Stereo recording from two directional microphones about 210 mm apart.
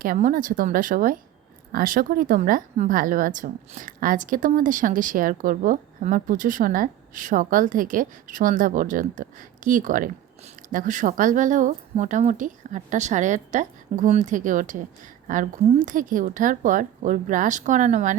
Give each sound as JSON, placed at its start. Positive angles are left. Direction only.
{"t": 0.0, "sound": "a woman's voice", "side_deg": -40}